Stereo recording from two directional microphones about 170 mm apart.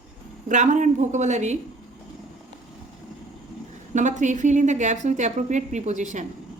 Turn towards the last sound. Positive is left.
turn(degrees=-45)  # may be behind; listen again after turning